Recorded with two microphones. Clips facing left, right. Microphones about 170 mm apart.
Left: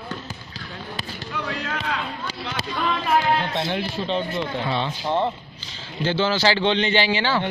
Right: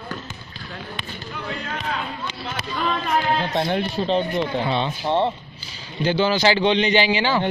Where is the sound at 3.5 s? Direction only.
40° right (ahead or behind).